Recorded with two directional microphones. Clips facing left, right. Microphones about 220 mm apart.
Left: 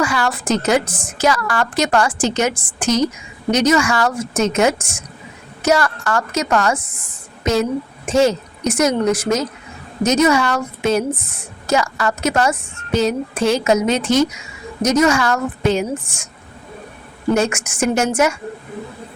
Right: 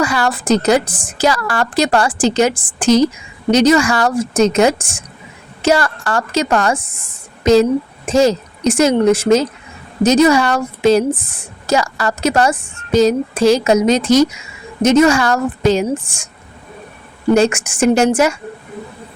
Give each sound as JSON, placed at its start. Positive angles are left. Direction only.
{"t": 0.0, "sound": "a woman's voice", "side_deg": -35}
{"t": 15.6, "sound": "a woman's voice", "side_deg": -90}
{"t": 17.3, "sound": "a woman's voice", "side_deg": -30}